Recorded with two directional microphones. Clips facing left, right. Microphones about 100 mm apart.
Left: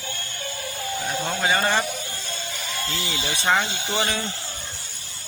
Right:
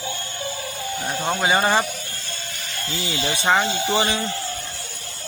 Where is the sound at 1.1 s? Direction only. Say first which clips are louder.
Right 3 dB; 15° right (ahead or behind).